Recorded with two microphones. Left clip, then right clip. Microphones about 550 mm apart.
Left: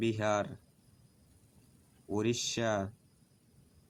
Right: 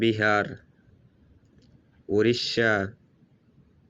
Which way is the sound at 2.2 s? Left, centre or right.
Left.